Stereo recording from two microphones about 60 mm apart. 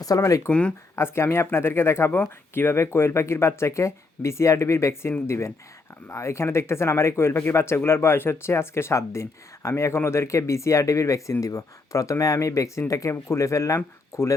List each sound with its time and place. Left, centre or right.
0.2 s speech: left
0.9 s speech: left